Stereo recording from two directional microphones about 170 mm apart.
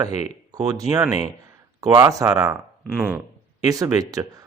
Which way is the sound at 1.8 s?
20° right (ahead or behind).